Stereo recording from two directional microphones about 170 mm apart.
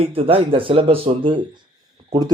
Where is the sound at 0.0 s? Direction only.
35° right (ahead or behind).